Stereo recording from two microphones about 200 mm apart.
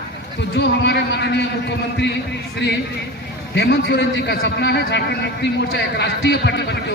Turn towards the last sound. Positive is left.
turn(degrees=60)  # may be behind; listen again after turning